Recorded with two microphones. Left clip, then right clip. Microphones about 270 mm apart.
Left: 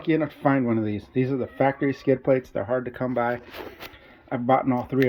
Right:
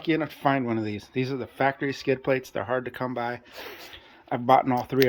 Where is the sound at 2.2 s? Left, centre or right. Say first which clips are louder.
Left 3 dB; centre.